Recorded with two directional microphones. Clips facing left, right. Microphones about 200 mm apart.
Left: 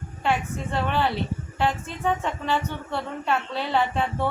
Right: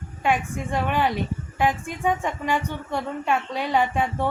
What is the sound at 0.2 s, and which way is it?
A woman's voice, 15° right (ahead or behind).